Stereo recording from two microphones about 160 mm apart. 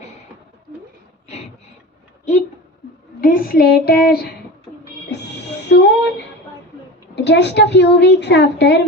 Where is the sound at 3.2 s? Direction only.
60° left (ahead or behind).